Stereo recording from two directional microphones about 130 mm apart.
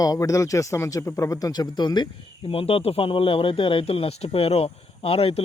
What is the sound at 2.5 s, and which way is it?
Speech, 45° left (ahead or behind).